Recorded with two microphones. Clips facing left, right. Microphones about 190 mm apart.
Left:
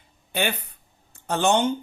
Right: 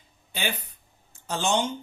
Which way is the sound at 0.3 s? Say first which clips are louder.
Left 5 dB; 60° left (ahead or behind).